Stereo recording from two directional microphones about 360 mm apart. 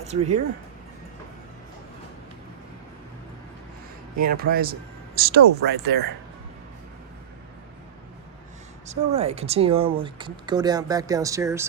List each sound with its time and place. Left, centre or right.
0.0 s a sound: centre
4.2 s speech: right
8.9 s speech: centre